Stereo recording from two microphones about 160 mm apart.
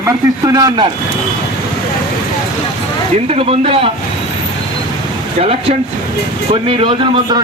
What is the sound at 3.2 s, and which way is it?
Speech, 40° right (ahead or behind).